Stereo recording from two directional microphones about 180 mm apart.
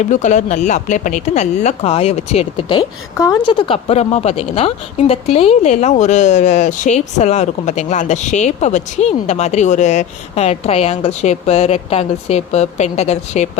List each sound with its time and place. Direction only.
0.0 s a woman's voice: 45° left (ahead or behind)